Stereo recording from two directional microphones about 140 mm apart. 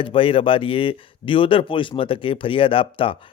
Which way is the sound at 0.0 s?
40° left (ahead or behind).